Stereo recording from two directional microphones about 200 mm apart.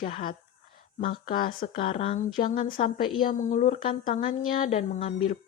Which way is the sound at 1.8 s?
35° left (ahead or behind).